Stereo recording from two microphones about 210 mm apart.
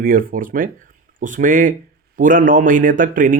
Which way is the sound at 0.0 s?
40° right (ahead or behind).